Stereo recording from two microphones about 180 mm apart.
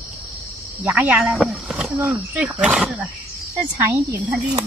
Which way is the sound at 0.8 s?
10° right (ahead or behind).